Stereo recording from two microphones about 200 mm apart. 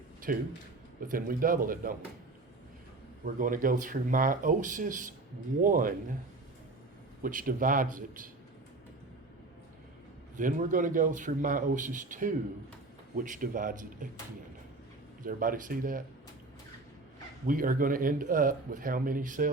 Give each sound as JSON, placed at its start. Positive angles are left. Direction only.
{"t": 0.3, "sound": "speech", "side_deg": -45}
{"t": 3.2, "sound": "speech", "side_deg": -40}
{"t": 7.2, "sound": "speech", "side_deg": -45}
{"t": 10.3, "sound": "speech", "side_deg": -40}
{"t": 15.3, "sound": "speech", "side_deg": -45}
{"t": 17.4, "sound": "speech", "side_deg": -45}